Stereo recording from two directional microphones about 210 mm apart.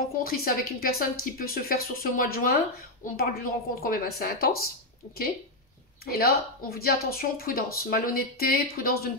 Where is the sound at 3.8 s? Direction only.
45° left (ahead or behind).